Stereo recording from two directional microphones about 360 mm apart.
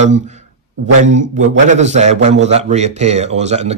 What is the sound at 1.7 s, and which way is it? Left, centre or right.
Speech, centre.